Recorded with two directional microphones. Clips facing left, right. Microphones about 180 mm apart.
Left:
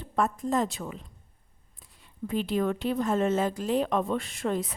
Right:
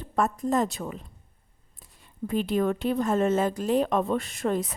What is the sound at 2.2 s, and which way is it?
A woman's voice, 50° right (ahead or behind).